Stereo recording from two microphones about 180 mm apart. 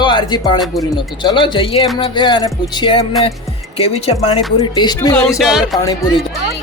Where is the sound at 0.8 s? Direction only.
25° left (ahead or behind).